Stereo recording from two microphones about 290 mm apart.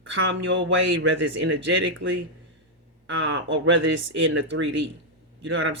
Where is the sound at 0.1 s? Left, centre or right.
Right.